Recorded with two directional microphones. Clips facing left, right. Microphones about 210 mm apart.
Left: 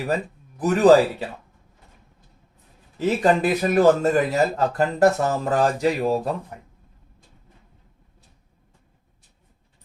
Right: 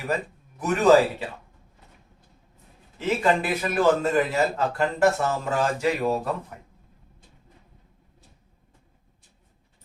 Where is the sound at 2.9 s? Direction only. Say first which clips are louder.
Left 3 dB; 40° left (ahead or behind).